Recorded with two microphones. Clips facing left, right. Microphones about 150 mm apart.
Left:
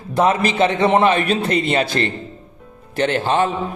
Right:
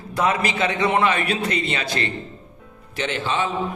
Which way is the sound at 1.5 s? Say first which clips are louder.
Left 7 dB; 50° left (ahead or behind).